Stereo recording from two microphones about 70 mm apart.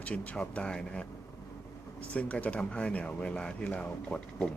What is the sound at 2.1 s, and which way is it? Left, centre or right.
Speech, centre.